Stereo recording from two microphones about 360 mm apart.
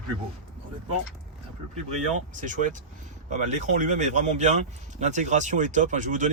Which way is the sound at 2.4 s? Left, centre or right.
Right.